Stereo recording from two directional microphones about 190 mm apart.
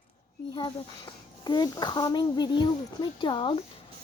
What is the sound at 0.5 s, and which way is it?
Speech, 25° left (ahead or behind).